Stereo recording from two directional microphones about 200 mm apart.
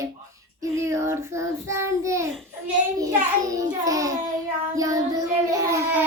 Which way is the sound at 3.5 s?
15° right (ahead or behind).